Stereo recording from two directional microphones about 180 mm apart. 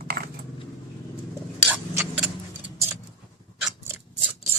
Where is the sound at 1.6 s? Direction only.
5° right (ahead or behind).